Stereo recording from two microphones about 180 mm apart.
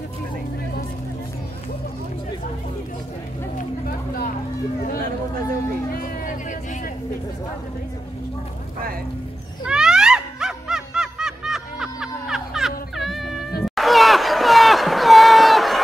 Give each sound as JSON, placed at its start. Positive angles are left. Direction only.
{"t": 3.5, "sound": "vehicle", "side_deg": 50}
{"t": 5.9, "sound": "vehicle", "side_deg": 50}
{"t": 9.7, "sound": "music", "side_deg": -5}
{"t": 13.6, "sound": "a sound", "side_deg": 0}